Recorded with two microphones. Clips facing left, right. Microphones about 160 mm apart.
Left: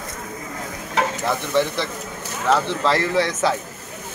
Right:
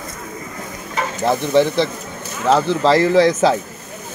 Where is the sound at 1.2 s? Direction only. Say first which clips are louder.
Right 10 dB; 20° right (ahead or behind).